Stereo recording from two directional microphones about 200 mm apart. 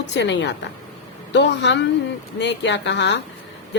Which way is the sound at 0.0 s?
60° left (ahead or behind).